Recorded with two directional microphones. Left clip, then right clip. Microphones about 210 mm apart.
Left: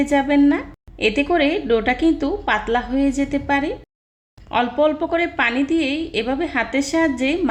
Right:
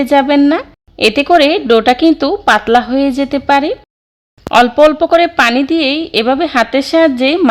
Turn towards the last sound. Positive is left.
turn(degrees=-35)  # may be behind; listen again after turning